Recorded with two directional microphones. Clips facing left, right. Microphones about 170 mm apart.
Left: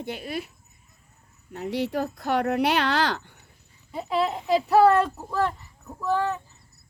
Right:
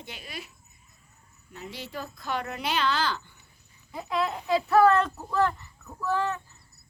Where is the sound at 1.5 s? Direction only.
65° left (ahead or behind).